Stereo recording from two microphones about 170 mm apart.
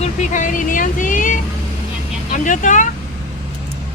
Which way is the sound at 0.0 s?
45° left (ahead or behind).